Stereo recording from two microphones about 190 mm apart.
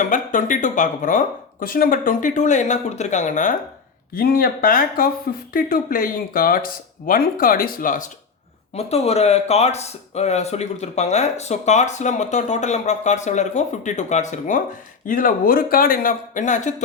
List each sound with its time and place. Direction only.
0.0 s speech: 45° left (ahead or behind)
4.1 s speech: 50° left (ahead or behind)
8.7 s speech: 35° left (ahead or behind)